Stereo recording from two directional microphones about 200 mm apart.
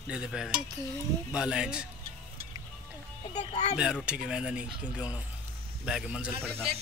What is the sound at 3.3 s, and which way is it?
Speech, 35° left (ahead or behind).